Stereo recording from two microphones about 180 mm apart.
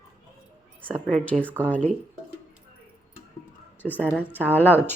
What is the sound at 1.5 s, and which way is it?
Speech, 10° right (ahead or behind).